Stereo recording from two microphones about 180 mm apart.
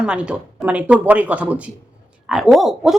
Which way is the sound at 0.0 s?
5° right (ahead or behind).